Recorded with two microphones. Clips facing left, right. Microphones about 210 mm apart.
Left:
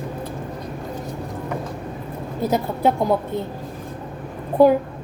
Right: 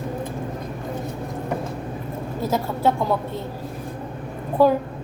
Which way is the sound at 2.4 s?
15° left (ahead or behind).